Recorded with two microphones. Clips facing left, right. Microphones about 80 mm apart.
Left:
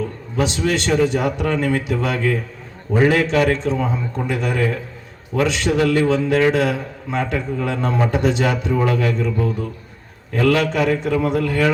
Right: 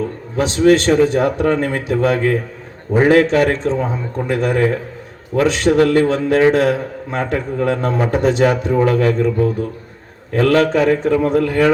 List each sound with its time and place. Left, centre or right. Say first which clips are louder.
0.3 s a man's voice: right 7 dB; right